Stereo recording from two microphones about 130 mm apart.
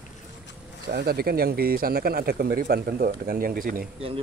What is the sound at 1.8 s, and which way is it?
Speech, 90° right.